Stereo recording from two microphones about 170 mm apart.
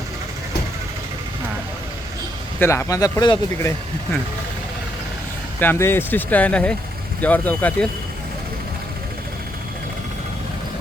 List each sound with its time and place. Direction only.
2.6 s speech: 15° left (ahead or behind)
5.5 s speech: 15° left (ahead or behind)